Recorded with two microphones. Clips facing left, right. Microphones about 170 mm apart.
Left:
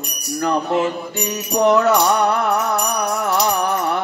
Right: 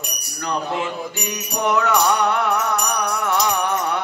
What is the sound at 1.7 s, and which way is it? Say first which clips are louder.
Music: left 3 dB; 40° left (ahead or behind).